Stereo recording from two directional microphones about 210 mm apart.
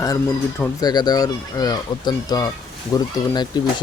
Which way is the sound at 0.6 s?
20° left (ahead or behind).